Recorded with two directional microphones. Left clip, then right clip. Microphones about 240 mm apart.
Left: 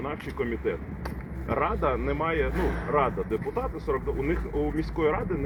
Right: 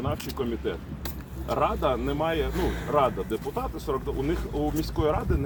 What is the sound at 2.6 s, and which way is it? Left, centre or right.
Speech, centre.